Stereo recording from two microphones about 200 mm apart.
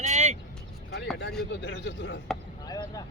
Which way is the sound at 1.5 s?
60° left (ahead or behind).